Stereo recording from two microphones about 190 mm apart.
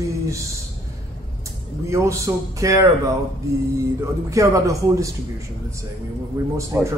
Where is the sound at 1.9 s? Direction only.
15° right (ahead or behind).